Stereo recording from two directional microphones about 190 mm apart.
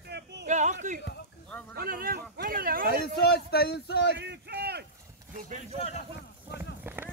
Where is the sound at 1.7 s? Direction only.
50° right (ahead or behind).